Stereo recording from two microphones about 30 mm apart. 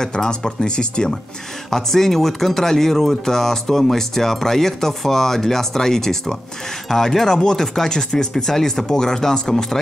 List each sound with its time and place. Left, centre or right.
0.0 s speech: left
1.7 s speech: centre